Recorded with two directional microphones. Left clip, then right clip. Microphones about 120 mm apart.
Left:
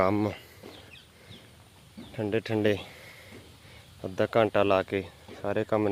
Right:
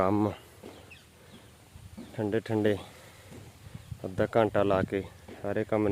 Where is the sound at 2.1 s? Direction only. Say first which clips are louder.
Left 1 dB; 5° right (ahead or behind).